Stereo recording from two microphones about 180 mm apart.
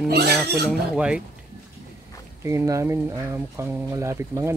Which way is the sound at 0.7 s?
5° right (ahead or behind).